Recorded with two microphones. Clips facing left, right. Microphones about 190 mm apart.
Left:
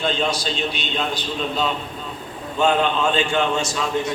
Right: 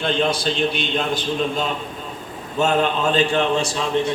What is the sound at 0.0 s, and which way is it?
A man's voice, 55° right (ahead or behind).